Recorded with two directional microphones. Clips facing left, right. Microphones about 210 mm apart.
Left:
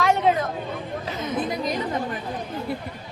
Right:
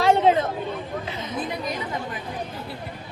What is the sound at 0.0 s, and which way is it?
Chatter, 30° right (ahead or behind).